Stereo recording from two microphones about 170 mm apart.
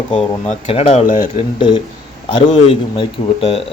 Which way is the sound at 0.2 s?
35° left (ahead or behind).